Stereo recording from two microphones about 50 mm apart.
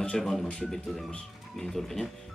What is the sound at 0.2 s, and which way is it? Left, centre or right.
Speech, centre.